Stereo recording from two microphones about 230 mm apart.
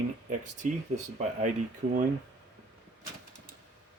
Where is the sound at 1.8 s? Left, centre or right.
Right.